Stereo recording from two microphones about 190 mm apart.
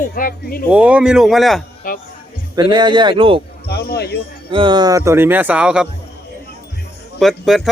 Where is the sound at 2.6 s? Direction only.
25° right (ahead or behind).